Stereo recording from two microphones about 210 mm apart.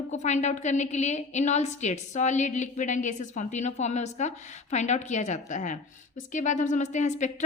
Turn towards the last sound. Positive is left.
turn(degrees=35)  # may be behind; listen again after turning